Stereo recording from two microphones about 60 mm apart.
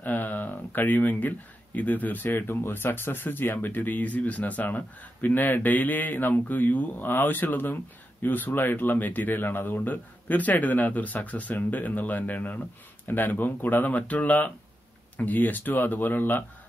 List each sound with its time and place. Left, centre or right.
0.0 s speech: left